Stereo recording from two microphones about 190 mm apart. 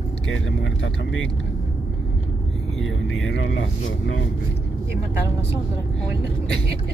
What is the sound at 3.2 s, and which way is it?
Speech, 85° left.